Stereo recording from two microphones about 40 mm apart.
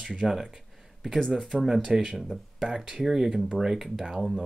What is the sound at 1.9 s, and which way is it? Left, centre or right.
Speech, centre.